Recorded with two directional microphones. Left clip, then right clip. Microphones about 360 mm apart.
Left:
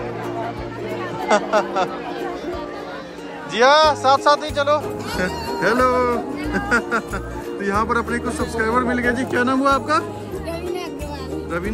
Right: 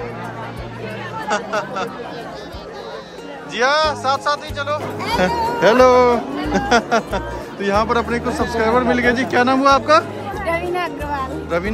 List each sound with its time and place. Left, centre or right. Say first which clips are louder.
1.3 s speech: left 4 dB; centre
3.5 s speech: left 3 dB; centre